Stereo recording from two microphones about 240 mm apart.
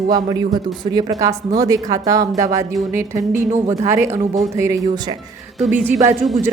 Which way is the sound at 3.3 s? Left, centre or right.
Right.